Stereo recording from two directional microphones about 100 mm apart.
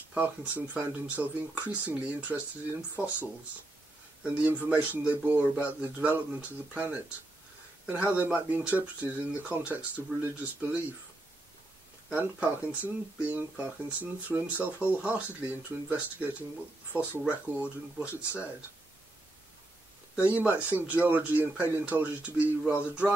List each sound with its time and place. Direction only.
0.1 s speech: 15° right (ahead or behind)
4.2 s speech: 15° right (ahead or behind)
12.1 s speech: 15° right (ahead or behind)
20.2 s speech: 15° right (ahead or behind)